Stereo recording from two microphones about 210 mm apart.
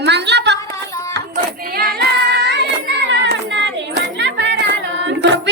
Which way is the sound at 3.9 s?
55° right (ahead or behind).